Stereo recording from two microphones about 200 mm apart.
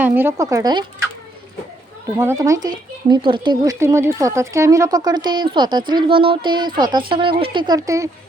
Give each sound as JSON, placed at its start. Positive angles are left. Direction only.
{"t": 0.0, "sound": "speech", "side_deg": -10}
{"t": 2.0, "sound": "speech", "side_deg": -15}